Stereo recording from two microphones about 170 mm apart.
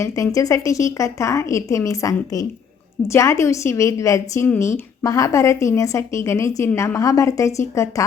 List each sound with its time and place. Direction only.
0.0 s a woman's voice: 20° left (ahead or behind)